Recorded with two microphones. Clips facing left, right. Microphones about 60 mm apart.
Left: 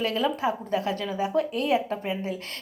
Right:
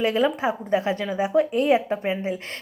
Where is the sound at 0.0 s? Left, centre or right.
Right.